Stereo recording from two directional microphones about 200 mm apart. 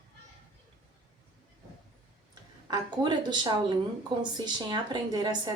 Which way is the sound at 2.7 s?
20° right (ahead or behind).